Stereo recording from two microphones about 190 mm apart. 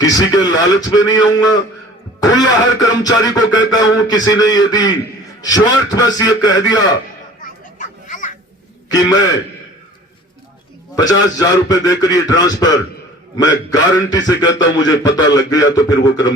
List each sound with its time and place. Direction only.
0.0 s a man's voice: 20° left (ahead or behind)
7.4 s children playing: 40° left (ahead or behind)
8.9 s a man's voice: 20° left (ahead or behind)
10.9 s a man's voice: 20° left (ahead or behind)